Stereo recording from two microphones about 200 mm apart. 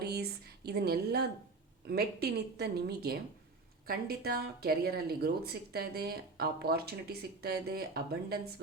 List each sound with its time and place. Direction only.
0.0 s a woman's voice: 55° right (ahead or behind)